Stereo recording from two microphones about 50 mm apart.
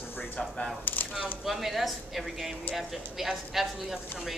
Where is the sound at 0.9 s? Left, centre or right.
Left.